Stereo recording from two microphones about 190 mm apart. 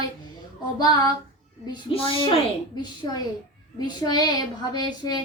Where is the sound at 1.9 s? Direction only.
30° left (ahead or behind).